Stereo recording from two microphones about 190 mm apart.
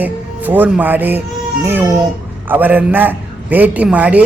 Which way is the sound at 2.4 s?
10° right (ahead or behind).